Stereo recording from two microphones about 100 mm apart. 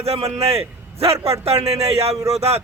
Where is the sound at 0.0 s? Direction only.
90° right.